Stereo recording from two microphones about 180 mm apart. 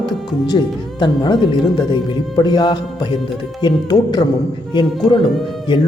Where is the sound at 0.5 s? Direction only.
25° left (ahead or behind).